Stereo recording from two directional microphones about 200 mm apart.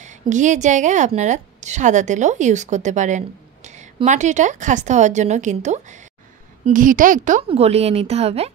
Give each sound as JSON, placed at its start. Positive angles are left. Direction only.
{"t": 0.0, "sound": "a woman's voice", "side_deg": -35}